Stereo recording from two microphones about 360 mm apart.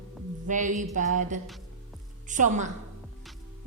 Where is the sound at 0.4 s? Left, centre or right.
Right.